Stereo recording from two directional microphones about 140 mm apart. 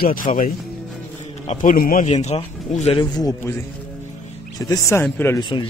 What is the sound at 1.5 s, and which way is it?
Speech, 65° left (ahead or behind).